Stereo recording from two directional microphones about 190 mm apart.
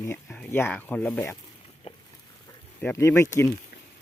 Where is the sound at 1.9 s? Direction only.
30° left (ahead or behind).